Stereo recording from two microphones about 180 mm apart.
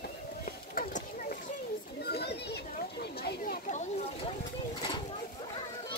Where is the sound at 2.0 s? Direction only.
65° left (ahead or behind).